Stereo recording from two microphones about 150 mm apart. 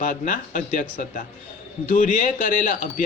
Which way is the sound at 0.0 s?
60° left (ahead or behind).